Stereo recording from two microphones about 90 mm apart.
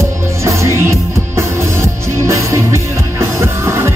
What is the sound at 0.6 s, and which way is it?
Music, 30° right (ahead or behind).